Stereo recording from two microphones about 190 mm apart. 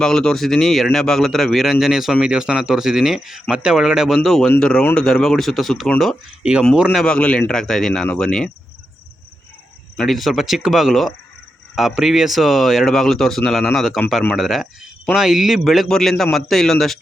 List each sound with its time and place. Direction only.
0.0 s speech: 5° left (ahead or behind)
10.0 s speech: centre (ahead or behind)